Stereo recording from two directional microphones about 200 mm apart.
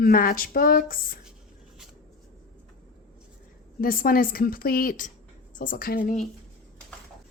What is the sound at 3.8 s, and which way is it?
Speech, 45° left (ahead or behind).